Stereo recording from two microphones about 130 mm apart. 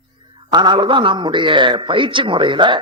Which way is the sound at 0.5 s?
35° right (ahead or behind).